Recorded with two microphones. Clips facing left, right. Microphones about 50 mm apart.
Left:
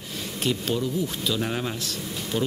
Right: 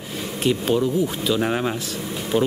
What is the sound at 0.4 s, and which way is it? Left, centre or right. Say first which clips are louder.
Speech: right 6 dB; centre.